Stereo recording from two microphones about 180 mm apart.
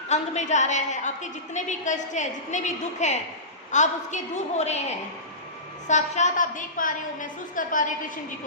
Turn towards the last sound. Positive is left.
turn(degrees=45)  # may be behind; listen again after turning